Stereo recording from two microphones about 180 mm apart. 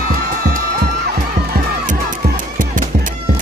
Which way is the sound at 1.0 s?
60° right (ahead or behind).